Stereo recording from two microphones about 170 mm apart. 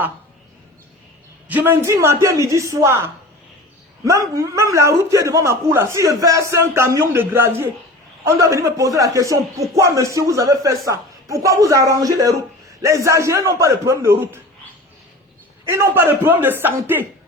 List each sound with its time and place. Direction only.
1.5 s a man's voice: 10° right (ahead or behind)
15.6 s a man's voice: 15° right (ahead or behind)